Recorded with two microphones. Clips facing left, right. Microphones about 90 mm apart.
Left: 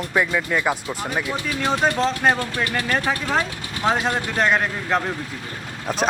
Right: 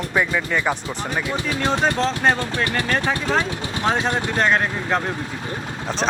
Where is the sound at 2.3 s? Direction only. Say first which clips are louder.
Right 1 dB; 25° right (ahead or behind).